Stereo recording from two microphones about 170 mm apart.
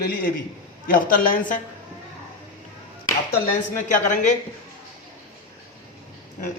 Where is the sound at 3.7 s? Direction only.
50° left (ahead or behind).